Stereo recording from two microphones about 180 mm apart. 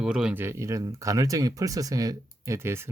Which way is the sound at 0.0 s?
5° right (ahead or behind).